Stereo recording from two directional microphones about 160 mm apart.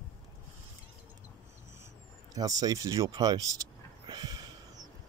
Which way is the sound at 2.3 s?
25° right (ahead or behind).